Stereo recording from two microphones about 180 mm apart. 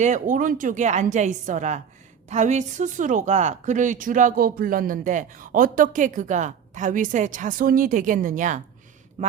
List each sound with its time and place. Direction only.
0.0 s a woman's voice: 45° right (ahead or behind)